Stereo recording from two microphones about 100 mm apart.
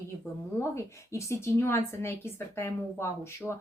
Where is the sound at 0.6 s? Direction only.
30° left (ahead or behind).